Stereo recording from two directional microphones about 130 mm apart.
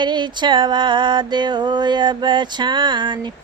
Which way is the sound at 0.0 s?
35° right (ahead or behind).